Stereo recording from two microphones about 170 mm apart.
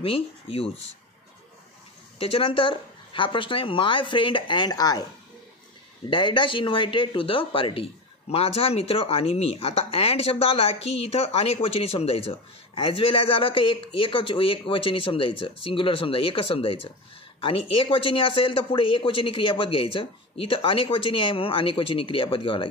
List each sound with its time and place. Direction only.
0.0 s speech: 35° left (ahead or behind)
2.1 s speech: 35° left (ahead or behind)
6.0 s speech: 30° left (ahead or behind)